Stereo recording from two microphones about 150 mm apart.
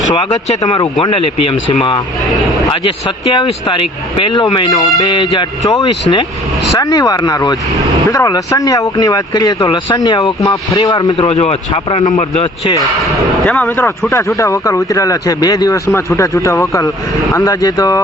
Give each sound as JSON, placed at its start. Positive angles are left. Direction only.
{"t": 1.0, "sound": "speech", "side_deg": 35}
{"t": 3.3, "sound": "speech", "side_deg": 35}
{"t": 11.2, "sound": "a man's voice", "side_deg": 45}
{"t": 13.0, "sound": "speech", "side_deg": 5}